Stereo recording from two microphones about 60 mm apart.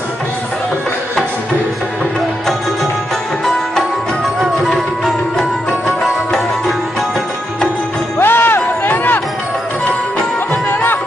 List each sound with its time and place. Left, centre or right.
4.4 s music: centre
8.2 s music: left
8.5 s a sound: left
10.5 s music: left